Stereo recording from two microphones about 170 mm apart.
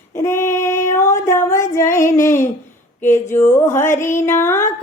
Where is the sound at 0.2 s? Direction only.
15° left (ahead or behind).